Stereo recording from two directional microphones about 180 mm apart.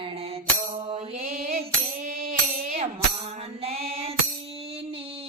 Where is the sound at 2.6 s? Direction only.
40° right (ahead or behind).